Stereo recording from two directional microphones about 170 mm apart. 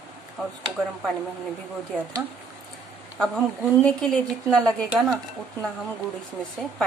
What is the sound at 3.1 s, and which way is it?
A woman's voice, 5° left (ahead or behind).